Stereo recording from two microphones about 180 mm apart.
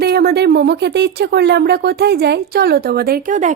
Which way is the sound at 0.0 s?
60° right (ahead or behind).